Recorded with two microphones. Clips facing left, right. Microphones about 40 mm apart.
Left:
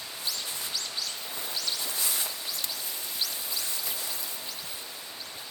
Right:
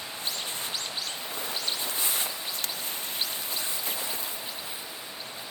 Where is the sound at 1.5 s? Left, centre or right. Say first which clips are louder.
Even; right.